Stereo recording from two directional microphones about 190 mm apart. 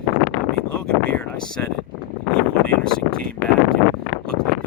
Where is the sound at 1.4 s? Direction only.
5° left (ahead or behind).